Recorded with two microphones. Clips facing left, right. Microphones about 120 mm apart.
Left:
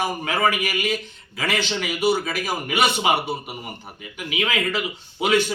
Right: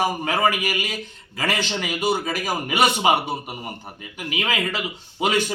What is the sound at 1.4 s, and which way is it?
Speech, 40° right (ahead or behind).